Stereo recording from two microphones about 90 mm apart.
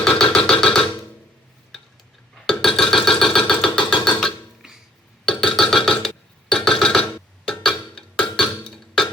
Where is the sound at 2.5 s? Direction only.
5° left (ahead or behind).